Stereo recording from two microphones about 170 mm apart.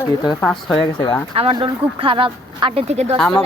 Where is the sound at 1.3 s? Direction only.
30° right (ahead or behind).